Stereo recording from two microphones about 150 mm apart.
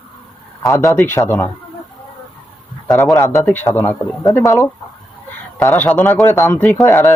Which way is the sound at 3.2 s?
20° left (ahead or behind).